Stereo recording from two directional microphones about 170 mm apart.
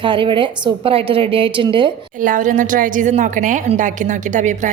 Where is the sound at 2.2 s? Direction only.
50° right (ahead or behind).